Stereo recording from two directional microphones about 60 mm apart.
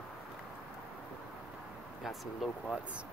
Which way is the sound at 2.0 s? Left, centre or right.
Centre.